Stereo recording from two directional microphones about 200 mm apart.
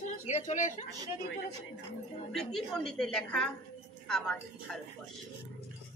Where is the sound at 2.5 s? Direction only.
Centre (ahead or behind).